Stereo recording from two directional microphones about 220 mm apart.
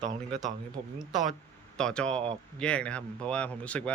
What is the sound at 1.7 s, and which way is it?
Speech, 5° left (ahead or behind).